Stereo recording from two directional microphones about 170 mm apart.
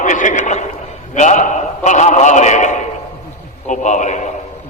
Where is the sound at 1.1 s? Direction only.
45° left (ahead or behind).